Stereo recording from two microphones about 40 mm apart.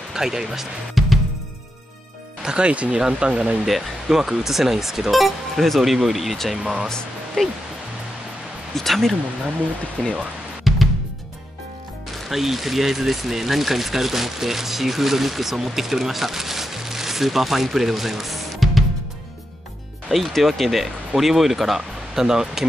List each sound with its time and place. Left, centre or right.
0.1 s speech: centre
2.4 s speech: right
3.6 s speech: centre
6.5 s speech: centre
7.4 s speech: centre
8.7 s speech: centre
10.7 s music: centre
12.3 s speech: centre
20.1 s speech: centre